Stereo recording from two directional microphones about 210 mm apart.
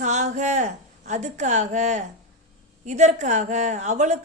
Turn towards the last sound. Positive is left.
turn(degrees=-35)  # may be behind; listen again after turning